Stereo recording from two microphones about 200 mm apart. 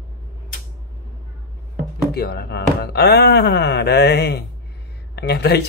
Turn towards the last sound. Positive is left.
turn(degrees=55)  # may be behind; listen again after turning